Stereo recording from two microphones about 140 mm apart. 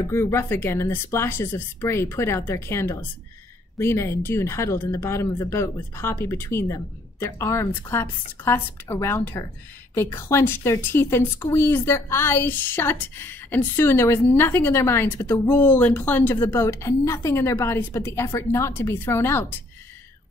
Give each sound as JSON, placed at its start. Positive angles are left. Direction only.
{"t": 0.0, "sound": "a woman's voice", "side_deg": 20}